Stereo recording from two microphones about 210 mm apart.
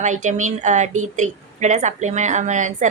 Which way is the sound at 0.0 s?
35° right (ahead or behind).